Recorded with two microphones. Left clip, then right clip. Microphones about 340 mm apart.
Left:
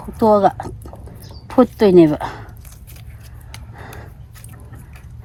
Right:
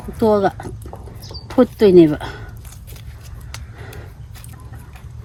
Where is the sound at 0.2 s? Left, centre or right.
Centre.